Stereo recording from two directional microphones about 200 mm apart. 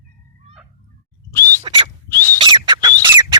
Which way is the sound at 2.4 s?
25° right (ahead or behind).